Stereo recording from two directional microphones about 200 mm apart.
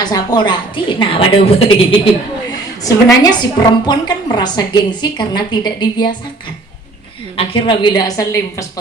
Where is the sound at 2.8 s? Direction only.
20° left (ahead or behind).